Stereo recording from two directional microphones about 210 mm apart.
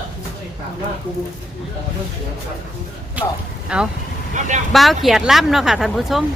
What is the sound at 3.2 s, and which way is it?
Speech, 5° right (ahead or behind).